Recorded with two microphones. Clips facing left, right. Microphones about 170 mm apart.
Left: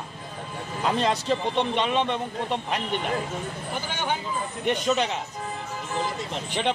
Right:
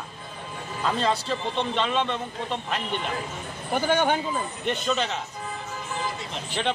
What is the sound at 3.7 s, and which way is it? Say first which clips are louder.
Speech: right 8 dB; 55° right (ahead or behind).